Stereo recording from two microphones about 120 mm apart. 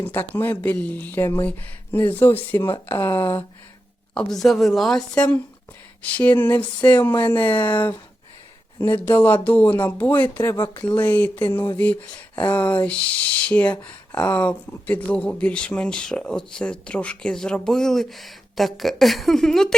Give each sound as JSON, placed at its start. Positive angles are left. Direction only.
{"t": 0.0, "sound": "speech", "side_deg": 15}
{"t": 4.1, "sound": "a woman's voice", "side_deg": 5}
{"t": 9.0, "sound": "speech", "side_deg": 15}